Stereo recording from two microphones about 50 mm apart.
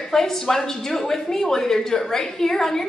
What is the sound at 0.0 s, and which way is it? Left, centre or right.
Speech, centre.